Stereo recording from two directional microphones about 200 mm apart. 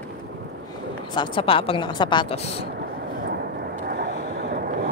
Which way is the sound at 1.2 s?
25° left (ahead or behind).